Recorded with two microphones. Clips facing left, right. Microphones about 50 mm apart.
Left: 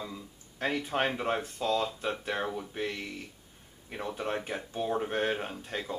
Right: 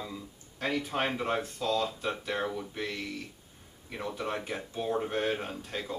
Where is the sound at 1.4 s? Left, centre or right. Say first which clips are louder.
Even; left.